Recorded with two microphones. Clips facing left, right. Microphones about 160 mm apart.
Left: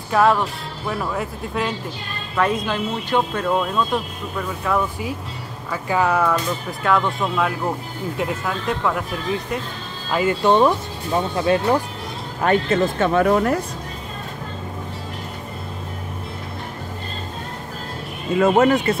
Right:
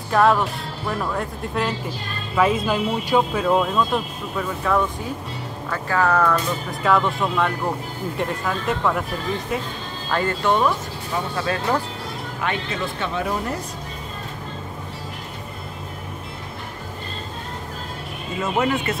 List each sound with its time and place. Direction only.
0.1 s speech: centre (ahead or behind)
5.7 s speech: 15° left (ahead or behind)
6.8 s speech: centre (ahead or behind)
10.4 s speech: 25° left (ahead or behind)
12.4 s speech: 45° left (ahead or behind); by 13.6 s 65° left (ahead or behind)
18.4 s speech: 45° left (ahead or behind)